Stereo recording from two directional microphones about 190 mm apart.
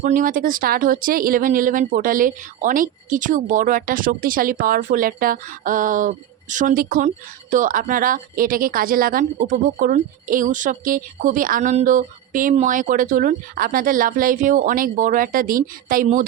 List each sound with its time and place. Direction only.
0.0 s speech: 45° right (ahead or behind)